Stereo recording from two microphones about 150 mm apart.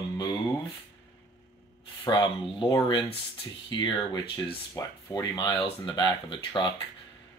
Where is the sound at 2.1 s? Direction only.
30° left (ahead or behind).